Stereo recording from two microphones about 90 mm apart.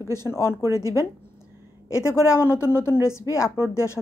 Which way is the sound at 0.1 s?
30° left (ahead or behind).